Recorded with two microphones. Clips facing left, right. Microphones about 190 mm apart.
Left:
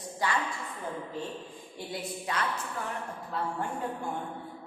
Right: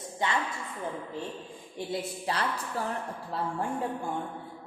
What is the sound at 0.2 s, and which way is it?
Speech, 25° right (ahead or behind).